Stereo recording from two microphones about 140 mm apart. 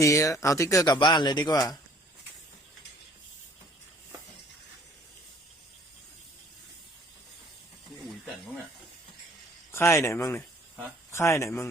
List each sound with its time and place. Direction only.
0.0 s a man's voice: 20° left (ahead or behind)
9.7 s speech: 15° left (ahead or behind)